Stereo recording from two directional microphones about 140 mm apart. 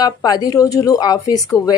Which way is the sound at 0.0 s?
30° left (ahead or behind).